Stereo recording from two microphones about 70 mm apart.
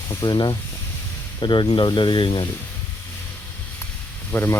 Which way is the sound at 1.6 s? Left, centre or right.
Left.